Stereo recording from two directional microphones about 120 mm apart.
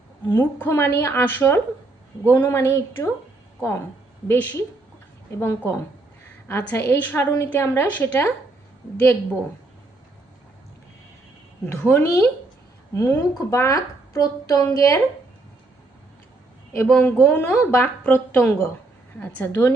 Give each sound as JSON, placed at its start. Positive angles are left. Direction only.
{"t": 0.3, "sound": "a woman's voice", "side_deg": 20}
{"t": 4.3, "sound": "a woman's voice", "side_deg": 20}
{"t": 11.8, "sound": "a woman's voice", "side_deg": 20}
{"t": 16.8, "sound": "a woman's voice", "side_deg": 10}